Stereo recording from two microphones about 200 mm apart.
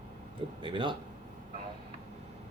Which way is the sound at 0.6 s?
25° right (ahead or behind).